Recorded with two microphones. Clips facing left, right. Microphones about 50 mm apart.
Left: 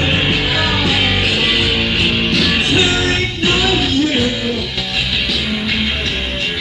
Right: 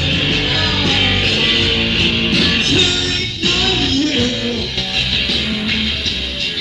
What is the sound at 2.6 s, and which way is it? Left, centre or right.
Music, centre.